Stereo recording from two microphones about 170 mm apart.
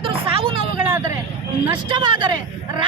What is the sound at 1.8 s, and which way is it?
Speech, 25° right (ahead or behind).